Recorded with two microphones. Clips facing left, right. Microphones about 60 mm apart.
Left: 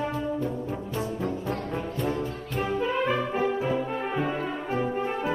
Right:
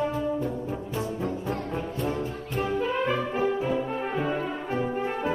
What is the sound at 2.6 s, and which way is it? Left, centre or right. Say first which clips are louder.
Brass instrument: even; centre.